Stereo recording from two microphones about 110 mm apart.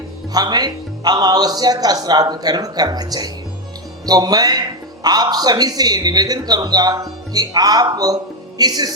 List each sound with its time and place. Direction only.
0.3 s speech: 35° right (ahead or behind)